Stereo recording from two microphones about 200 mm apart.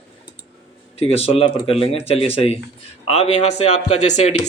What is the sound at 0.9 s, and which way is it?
Speech, 30° left (ahead or behind).